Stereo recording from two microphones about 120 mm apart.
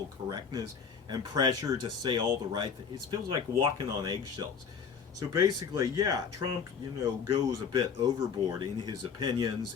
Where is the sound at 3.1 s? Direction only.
45° right (ahead or behind).